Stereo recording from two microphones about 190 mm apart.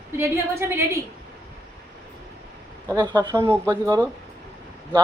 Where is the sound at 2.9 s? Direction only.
20° right (ahead or behind).